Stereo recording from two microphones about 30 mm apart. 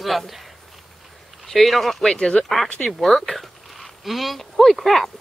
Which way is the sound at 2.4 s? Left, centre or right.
Left.